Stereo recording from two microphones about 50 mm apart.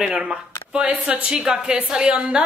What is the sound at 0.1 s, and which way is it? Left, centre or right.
Speech, centre.